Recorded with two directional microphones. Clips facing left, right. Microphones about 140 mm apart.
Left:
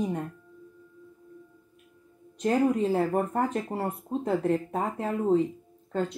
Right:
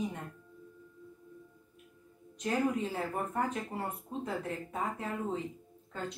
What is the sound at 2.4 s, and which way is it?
Speech, 45° left (ahead or behind).